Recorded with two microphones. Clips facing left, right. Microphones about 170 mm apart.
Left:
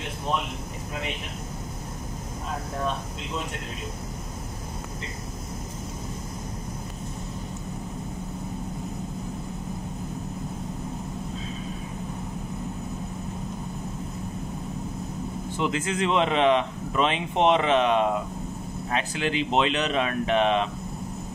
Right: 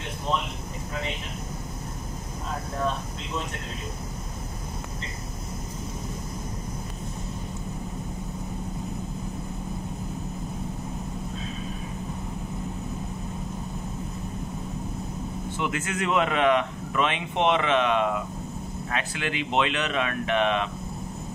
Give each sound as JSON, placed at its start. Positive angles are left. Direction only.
{"t": 15.6, "sound": "speech", "side_deg": 30}